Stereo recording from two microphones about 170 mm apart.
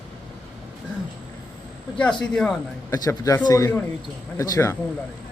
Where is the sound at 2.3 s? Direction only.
5° left (ahead or behind).